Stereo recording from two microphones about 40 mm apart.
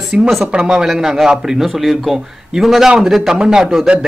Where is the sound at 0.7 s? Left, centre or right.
Centre.